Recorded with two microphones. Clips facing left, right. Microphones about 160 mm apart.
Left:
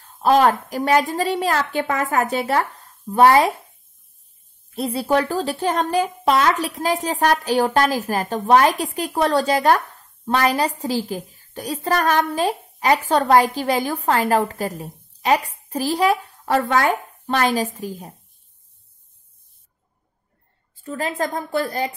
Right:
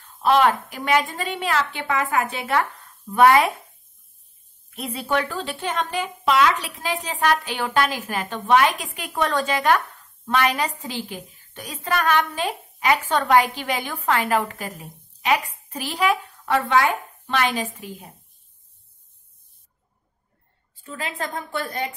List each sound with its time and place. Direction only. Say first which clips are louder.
0.0 s speech: left 2 dB; 40° left (ahead or behind)
4.6 s speech: left 6 dB; 35° left (ahead or behind)
20.8 s speech: left 6 dB; 40° left (ahead or behind)